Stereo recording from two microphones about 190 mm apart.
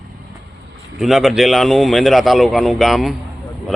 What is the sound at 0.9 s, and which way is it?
A man's voice, centre (ahead or behind).